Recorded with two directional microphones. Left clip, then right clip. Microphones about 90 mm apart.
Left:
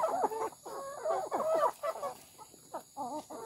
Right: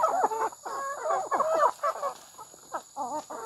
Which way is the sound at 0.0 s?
25° right (ahead or behind).